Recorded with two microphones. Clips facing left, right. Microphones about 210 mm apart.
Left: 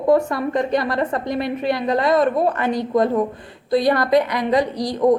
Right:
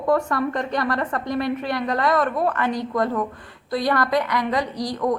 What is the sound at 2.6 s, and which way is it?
A woman's voice, 15° left (ahead or behind).